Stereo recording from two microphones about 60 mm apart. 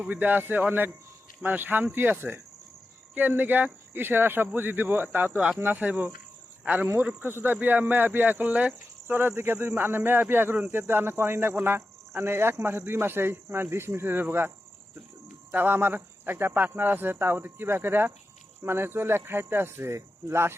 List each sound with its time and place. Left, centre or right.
0.1 s speech: right
6.8 s speech: right
15.5 s speech: right